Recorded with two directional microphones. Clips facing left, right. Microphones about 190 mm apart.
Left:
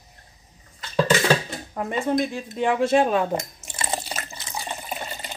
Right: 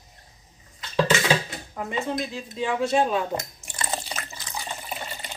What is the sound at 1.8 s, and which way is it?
Speech, 55° left (ahead or behind).